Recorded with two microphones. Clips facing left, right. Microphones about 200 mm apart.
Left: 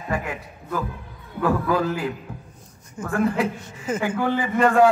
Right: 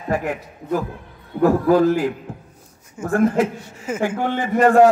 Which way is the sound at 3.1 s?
45° right (ahead or behind).